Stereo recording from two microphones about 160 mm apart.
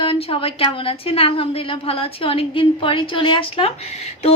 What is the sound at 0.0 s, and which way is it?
A woman's voice, 35° left (ahead or behind).